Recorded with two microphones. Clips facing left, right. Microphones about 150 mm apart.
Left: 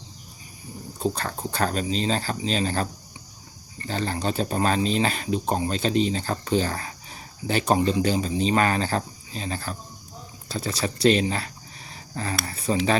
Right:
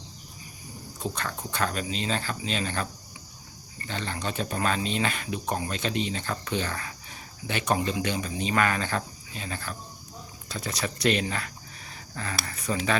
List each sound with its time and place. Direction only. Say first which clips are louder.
0.9 s speech: left 6 dB; 35° left (ahead or behind)